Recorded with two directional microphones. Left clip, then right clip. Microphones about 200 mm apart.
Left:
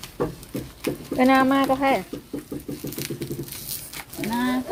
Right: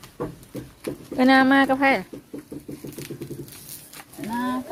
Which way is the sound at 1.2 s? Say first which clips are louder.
Right 2 dB; 25° right (ahead or behind).